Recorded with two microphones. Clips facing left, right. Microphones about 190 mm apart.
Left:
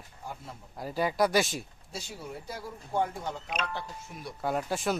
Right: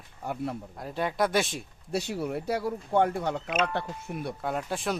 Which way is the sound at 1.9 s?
65° right (ahead or behind).